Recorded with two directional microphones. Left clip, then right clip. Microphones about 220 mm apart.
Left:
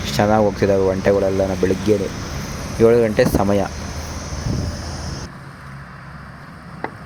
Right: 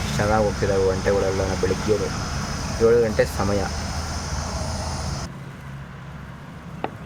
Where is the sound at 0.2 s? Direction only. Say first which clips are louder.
Left 5 dB; 25° left (ahead or behind).